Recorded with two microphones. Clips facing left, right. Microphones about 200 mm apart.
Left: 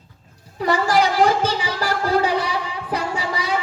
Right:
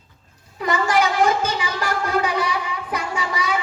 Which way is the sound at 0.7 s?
35° left (ahead or behind).